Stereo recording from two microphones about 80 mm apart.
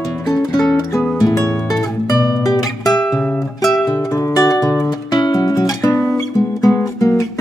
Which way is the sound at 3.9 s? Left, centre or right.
Left.